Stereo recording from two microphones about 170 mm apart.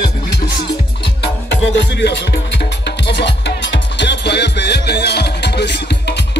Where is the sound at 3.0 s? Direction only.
90° left.